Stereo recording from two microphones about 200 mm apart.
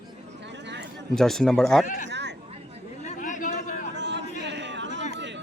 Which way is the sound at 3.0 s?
40° left (ahead or behind).